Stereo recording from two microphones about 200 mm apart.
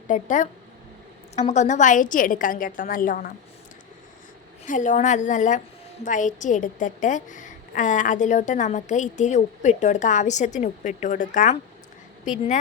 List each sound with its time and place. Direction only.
0.1 s a woman's voice: 40° left (ahead or behind)
4.6 s a woman's voice: 40° left (ahead or behind)